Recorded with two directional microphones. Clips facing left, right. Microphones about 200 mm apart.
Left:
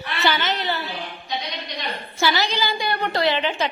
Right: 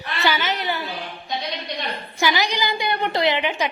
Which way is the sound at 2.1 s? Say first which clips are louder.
Even; 15° right (ahead or behind).